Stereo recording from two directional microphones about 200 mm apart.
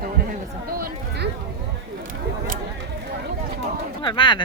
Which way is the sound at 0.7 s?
50° right (ahead or behind).